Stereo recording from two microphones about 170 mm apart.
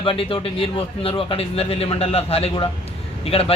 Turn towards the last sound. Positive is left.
turn(degrees=35)  # may be behind; listen again after turning